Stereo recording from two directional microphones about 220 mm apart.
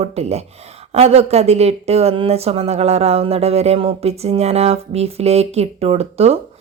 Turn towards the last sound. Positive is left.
turn(degrees=-30)  # may be behind; listen again after turning